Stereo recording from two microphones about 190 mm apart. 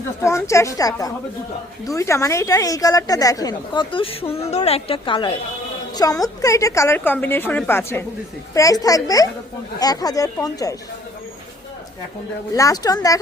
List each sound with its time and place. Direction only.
0.2 s a woman's voice: 15° left (ahead or behind)
12.5 s a woman's voice: 20° left (ahead or behind)